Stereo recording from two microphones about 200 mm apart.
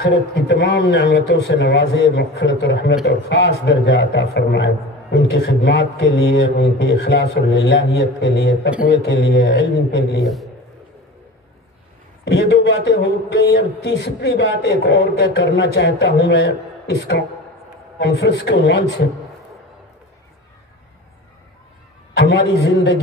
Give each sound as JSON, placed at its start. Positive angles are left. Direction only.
{"t": 0.0, "sound": "speech", "side_deg": 70}
{"t": 5.1, "sound": "a man's voice", "side_deg": 50}
{"t": 5.8, "sound": "speech", "side_deg": 70}
{"t": 9.4, "sound": "speech", "side_deg": 60}
{"t": 10.2, "sound": "a man's voice", "side_deg": 0}
{"t": 12.3, "sound": "a man's voice", "side_deg": 65}
{"t": 22.1, "sound": "speech", "side_deg": 65}